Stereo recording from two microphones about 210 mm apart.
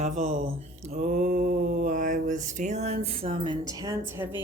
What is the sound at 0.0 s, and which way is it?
Mantra, 35° right (ahead or behind).